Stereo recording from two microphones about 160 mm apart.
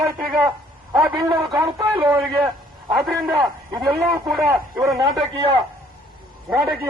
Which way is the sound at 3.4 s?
20° right (ahead or behind).